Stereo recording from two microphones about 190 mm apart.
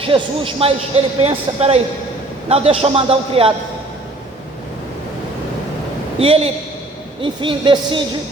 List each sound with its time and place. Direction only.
0.0 s a man's voice: 30° right (ahead or behind)
6.1 s a man's voice: 30° right (ahead or behind)